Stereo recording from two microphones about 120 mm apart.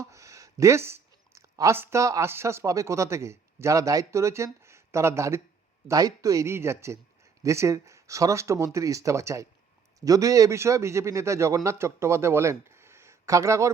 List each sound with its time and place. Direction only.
0.0 s a man's voice: 25° right (ahead or behind)